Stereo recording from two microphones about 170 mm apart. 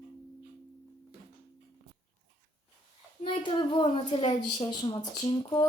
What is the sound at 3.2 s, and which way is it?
A woman's voice, 30° left (ahead or behind).